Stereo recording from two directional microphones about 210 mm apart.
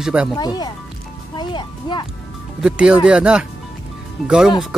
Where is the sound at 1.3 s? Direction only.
20° left (ahead or behind).